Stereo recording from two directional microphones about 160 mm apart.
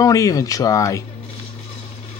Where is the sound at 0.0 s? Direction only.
20° left (ahead or behind).